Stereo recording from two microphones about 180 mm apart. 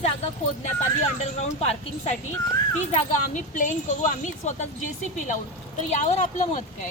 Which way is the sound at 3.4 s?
45° left (ahead or behind).